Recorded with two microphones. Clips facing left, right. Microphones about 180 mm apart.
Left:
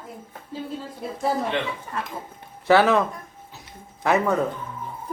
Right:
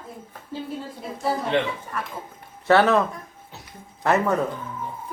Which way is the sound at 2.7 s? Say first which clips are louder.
Even; centre (ahead or behind).